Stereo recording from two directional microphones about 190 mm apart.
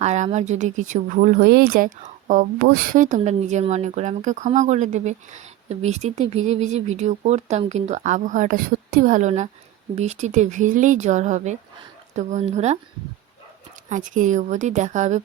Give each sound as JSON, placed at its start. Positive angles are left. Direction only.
{"t": 0.0, "sound": "speech", "side_deg": -35}
{"t": 13.9, "sound": "speech", "side_deg": -40}